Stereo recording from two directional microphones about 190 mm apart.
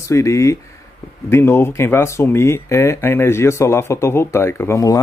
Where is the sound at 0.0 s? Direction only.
15° left (ahead or behind).